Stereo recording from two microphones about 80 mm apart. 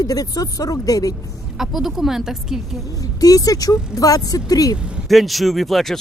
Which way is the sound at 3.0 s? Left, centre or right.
Left.